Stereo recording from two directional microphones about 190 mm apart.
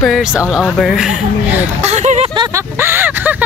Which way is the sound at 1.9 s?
35° right (ahead or behind).